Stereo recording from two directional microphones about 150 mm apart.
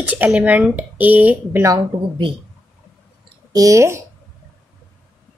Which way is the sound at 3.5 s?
20° right (ahead or behind).